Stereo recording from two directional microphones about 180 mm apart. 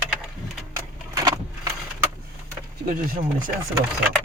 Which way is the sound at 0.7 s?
20° right (ahead or behind).